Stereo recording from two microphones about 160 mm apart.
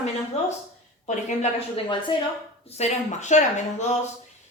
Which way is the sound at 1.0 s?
45° left (ahead or behind).